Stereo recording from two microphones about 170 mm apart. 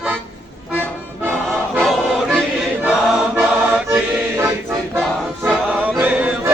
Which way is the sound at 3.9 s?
15° right (ahead or behind).